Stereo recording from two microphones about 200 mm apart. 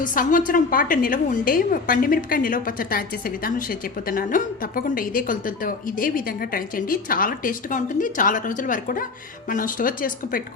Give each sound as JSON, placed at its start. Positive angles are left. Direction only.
{"t": 0.0, "sound": "a woman's voice", "side_deg": 40}